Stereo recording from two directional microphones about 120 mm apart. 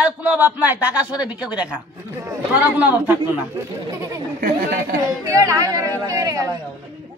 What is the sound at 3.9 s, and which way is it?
Chatter, 30° right (ahead or behind).